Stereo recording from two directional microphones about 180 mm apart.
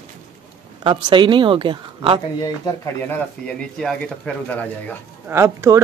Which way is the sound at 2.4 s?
15° left (ahead or behind).